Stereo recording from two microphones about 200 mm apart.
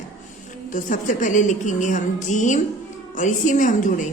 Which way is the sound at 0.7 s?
40° left (ahead or behind).